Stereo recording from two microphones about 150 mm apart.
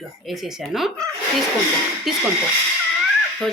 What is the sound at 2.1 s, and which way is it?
Speech, centre (ahead or behind).